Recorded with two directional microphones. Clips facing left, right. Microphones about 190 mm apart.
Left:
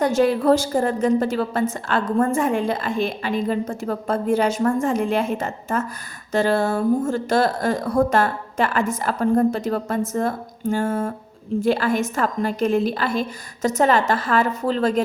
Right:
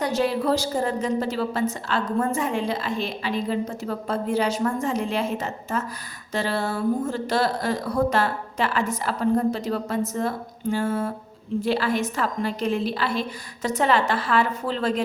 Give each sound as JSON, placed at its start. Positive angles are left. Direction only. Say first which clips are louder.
{"t": 0.0, "sound": "a woman's voice", "louder": "left 5 dB", "side_deg": 50}